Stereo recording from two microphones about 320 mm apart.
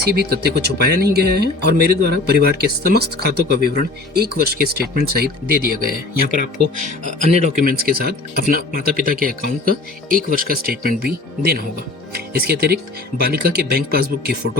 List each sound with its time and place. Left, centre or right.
0.1 s speech: right